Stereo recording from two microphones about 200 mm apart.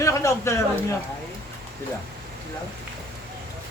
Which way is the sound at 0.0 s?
15° left (ahead or behind).